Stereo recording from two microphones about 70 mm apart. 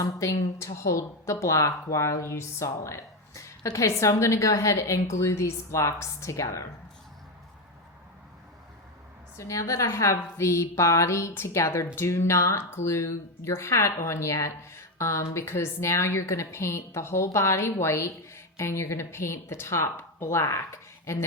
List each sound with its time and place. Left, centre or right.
0.0 s a woman's voice: left
9.4 s a woman's voice: left